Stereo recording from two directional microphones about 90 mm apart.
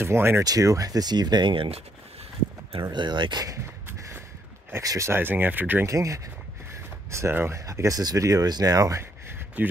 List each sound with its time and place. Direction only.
0.0 s speech: 25° right (ahead or behind)
0.4 s speech: 40° right (ahead or behind); by 1.8 s 70° right (ahead or behind)
2.7 s speech: 60° right (ahead or behind)
4.8 s speech: 30° right (ahead or behind)
5.9 s speech: 35° right (ahead or behind)
9.6 s speech: 20° right (ahead or behind)